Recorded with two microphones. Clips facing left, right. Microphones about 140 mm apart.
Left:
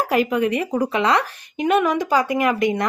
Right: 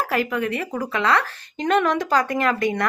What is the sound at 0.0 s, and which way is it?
Speech, 20° left (ahead or behind).